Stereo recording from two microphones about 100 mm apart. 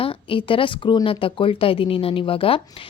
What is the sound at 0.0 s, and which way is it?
A woman's voice, 65° left (ahead or behind).